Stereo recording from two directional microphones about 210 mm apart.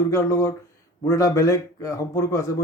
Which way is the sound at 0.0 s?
15° left (ahead or behind).